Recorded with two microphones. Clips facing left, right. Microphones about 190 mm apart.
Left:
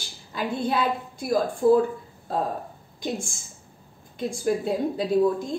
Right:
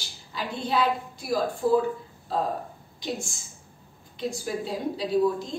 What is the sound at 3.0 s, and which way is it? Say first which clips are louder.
A woman's voice: left 3 dB; 50° left (ahead or behind).